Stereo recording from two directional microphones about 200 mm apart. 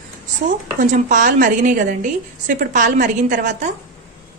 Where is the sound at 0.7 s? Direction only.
40° right (ahead or behind).